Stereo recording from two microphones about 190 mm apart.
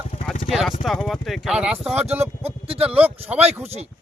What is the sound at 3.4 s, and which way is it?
Speech, 35° right (ahead or behind).